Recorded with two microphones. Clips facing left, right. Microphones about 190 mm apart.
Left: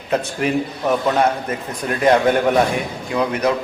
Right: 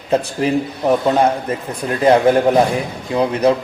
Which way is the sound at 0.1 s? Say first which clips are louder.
Right 3 dB; 30° right (ahead or behind).